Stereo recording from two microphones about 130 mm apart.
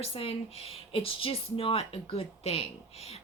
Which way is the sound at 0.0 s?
50° left (ahead or behind).